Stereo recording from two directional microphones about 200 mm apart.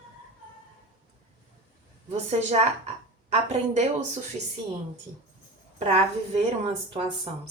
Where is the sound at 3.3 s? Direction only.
30° right (ahead or behind).